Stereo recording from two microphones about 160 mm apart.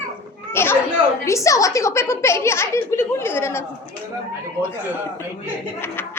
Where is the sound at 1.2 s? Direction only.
20° left (ahead or behind).